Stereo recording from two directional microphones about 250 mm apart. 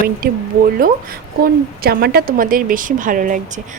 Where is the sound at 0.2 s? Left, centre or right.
Right.